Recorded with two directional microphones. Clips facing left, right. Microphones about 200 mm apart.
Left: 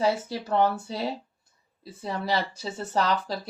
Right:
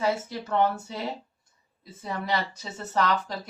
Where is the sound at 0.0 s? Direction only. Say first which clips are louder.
Left 2 dB; 35° left (ahead or behind).